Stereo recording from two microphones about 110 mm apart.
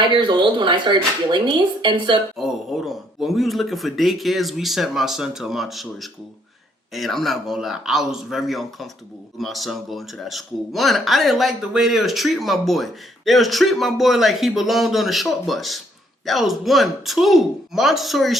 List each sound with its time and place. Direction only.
0.0 s speech: 45° right (ahead or behind)
2.4 s speech: centre (ahead or behind)